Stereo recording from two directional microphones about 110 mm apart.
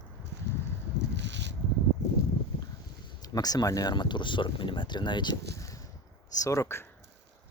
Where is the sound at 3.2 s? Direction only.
35° left (ahead or behind).